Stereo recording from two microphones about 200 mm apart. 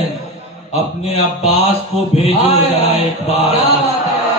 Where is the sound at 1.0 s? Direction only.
30° left (ahead or behind).